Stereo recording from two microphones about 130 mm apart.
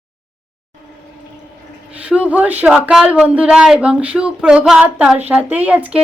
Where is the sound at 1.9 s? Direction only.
10° right (ahead or behind).